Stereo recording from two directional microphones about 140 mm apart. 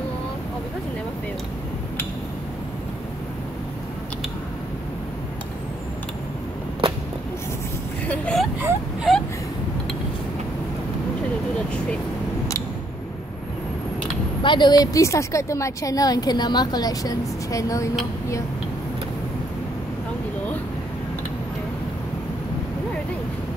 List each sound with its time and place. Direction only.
8.1 s vehicle: 5° left (ahead or behind)
14.4 s a woman's voice: 35° left (ahead or behind)